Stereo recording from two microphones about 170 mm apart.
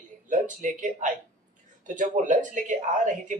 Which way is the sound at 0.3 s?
50° right (ahead or behind).